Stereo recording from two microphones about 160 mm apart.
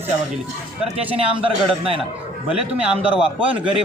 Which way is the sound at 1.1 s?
35° right (ahead or behind).